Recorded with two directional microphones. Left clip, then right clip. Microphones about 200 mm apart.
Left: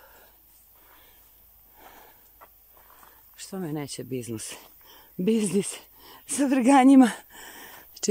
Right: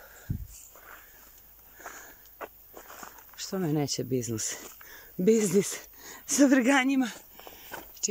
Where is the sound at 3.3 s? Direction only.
Centre (ahead or behind).